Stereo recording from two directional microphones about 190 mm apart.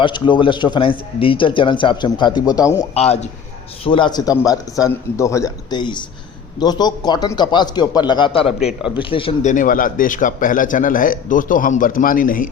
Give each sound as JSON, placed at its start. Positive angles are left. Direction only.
{"t": 0.0, "sound": "speech", "side_deg": 25}
{"t": 2.9, "sound": "a man's voice", "side_deg": 35}